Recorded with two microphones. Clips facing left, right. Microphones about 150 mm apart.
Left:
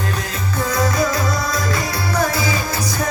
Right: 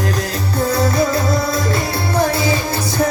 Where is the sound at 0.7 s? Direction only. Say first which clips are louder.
Right 2 dB; 25° right (ahead or behind).